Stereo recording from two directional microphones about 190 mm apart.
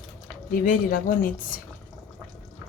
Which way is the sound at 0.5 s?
45° left (ahead or behind).